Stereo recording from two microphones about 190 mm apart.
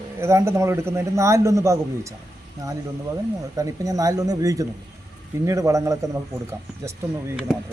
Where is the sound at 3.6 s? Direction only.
20° right (ahead or behind).